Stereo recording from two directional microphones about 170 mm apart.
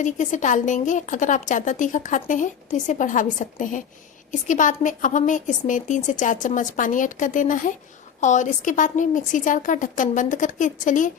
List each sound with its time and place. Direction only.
0.0 s a woman's voice: 45° left (ahead or behind)